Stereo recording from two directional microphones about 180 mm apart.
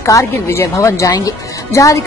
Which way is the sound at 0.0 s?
15° left (ahead or behind).